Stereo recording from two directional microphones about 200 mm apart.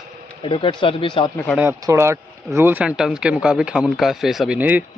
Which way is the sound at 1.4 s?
5° right (ahead or behind).